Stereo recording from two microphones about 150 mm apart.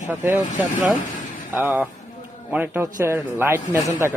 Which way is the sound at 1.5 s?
15° right (ahead or behind).